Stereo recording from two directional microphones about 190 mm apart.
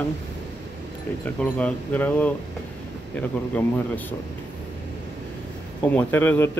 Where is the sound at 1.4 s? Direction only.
5° left (ahead or behind).